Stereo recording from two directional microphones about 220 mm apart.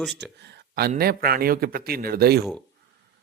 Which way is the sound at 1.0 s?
45° right (ahead or behind).